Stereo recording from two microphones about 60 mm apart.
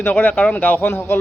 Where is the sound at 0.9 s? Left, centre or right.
Left.